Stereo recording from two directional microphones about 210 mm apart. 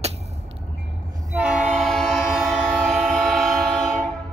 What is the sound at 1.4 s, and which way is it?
Train, 5° right (ahead or behind).